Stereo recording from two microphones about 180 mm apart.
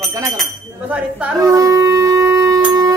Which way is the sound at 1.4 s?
20° right (ahead or behind).